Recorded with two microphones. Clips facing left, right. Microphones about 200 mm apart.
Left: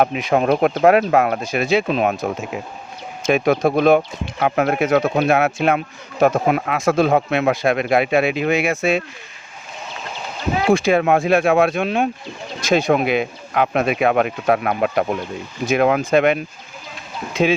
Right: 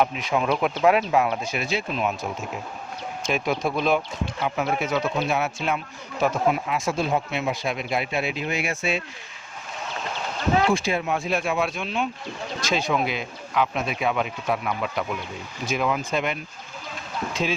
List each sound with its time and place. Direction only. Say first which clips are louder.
0.3 s speech: left 7 dB; 45° left (ahead or behind)
1.4 s speech: left 7 dB; 45° left (ahead or behind)
1.7 s speech: left 9 dB; 80° left
3.2 s speech: left 9 dB; 65° left (ahead or behind); by 8.8 s 80° left
8.8 s speech: left 8 dB; 50° left (ahead or behind)
10.7 s speech: left 9 dB; 80° left